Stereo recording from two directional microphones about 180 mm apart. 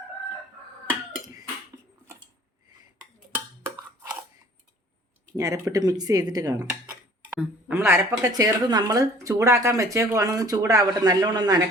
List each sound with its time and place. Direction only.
0.9 s cough: 15° right (ahead or behind)
3.3 s a sound: 15° right (ahead or behind)
5.4 s speech: 20° right (ahead or behind)
7.3 s speech: 10° right (ahead or behind)